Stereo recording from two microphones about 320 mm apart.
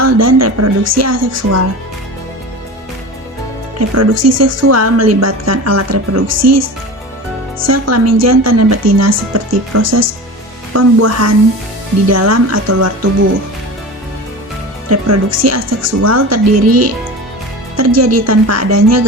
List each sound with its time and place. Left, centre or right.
0.0 s a woman's voice: right
3.8 s a woman's voice: right
14.8 s a woman's voice: right